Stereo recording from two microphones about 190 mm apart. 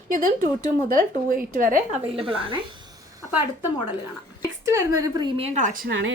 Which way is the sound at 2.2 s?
30° right (ahead or behind).